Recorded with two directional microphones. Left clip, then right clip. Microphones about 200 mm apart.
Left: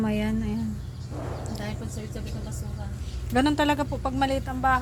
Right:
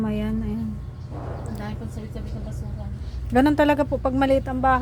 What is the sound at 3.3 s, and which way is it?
A woman's voice, 35° right (ahead or behind).